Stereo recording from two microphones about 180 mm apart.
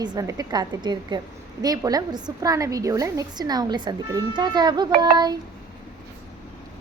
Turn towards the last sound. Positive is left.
turn(degrees=-25)  # may be behind; listen again after turning